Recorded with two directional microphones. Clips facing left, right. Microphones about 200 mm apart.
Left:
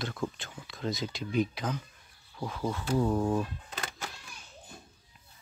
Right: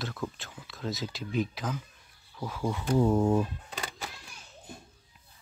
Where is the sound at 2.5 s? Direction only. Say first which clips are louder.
Right 2 dB; 10° right (ahead or behind).